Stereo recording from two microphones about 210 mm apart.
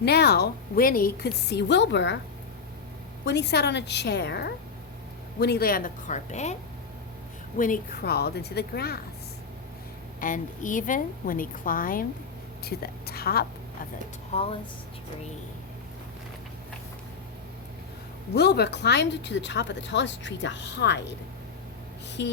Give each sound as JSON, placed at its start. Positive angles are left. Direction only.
{"t": 0.0, "sound": "a woman's voice", "side_deg": 50}
{"t": 3.2, "sound": "a woman's voice", "side_deg": 55}
{"t": 7.6, "sound": "a woman's voice", "side_deg": 40}
{"t": 10.2, "sound": "a woman's voice", "side_deg": 40}
{"t": 14.3, "sound": "speech", "side_deg": 30}
{"t": 18.3, "sound": "speech", "side_deg": 50}
{"t": 22.2, "sound": "speech", "side_deg": 55}